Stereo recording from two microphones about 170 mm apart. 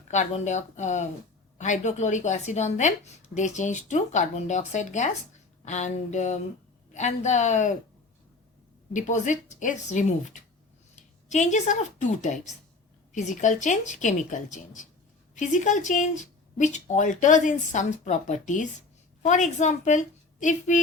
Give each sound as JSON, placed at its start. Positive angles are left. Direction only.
{"t": 0.1, "sound": "speech", "side_deg": 45}
{"t": 8.9, "sound": "speech", "side_deg": 45}